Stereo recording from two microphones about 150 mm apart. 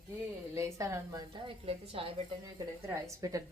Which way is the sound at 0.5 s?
20° right (ahead or behind).